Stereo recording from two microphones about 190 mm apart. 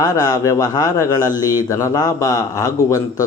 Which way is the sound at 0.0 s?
20° left (ahead or behind).